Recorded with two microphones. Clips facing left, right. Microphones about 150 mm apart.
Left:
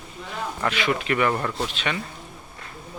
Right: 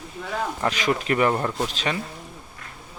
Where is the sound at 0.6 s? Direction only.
40° right (ahead or behind).